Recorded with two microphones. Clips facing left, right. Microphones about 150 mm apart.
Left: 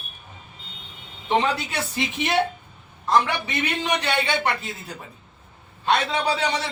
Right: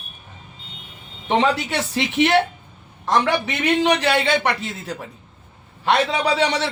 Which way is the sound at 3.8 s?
85° right.